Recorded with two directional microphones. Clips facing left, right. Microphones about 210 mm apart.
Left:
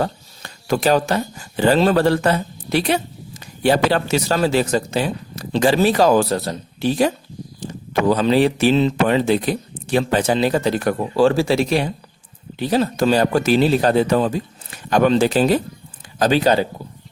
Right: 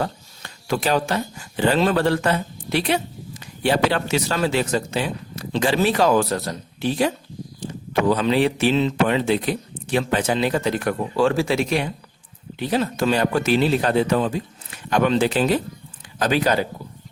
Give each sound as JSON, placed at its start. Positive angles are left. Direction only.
{"t": 0.0, "sound": "speech", "side_deg": 40}